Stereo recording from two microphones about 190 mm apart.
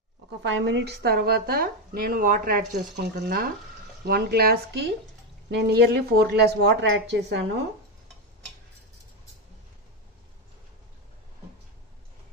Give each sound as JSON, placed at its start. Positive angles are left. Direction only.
{"t": 0.7, "sound": "speech", "side_deg": -65}